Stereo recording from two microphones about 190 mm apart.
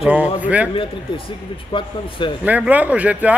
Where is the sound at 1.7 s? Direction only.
25° left (ahead or behind).